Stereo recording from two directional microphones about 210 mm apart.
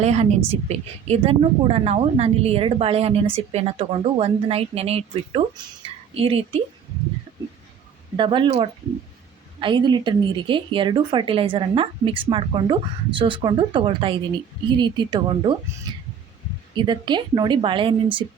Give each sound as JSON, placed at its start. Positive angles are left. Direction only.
{"t": 0.0, "sound": "a woman's voice", "side_deg": -30}
{"t": 8.1, "sound": "a woman's voice", "side_deg": -25}
{"t": 15.9, "sound": "a sound", "side_deg": -20}
{"t": 16.7, "sound": "a woman's voice", "side_deg": -20}